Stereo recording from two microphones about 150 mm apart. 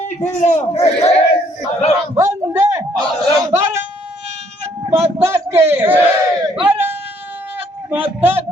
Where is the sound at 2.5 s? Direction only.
20° right (ahead or behind).